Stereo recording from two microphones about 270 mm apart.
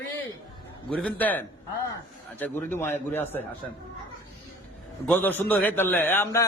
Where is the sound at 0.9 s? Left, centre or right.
Centre.